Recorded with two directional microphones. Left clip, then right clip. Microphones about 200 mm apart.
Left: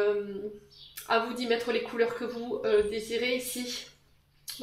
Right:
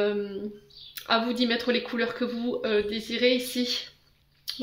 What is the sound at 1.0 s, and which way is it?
Speech, 50° right (ahead or behind).